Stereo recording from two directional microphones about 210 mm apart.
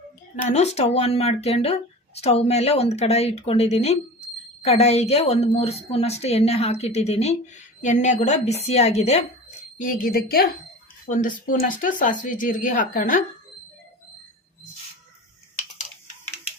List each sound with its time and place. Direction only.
0.4 s speech: 30° left (ahead or behind)
9.7 s a woman's voice: 40° left (ahead or behind)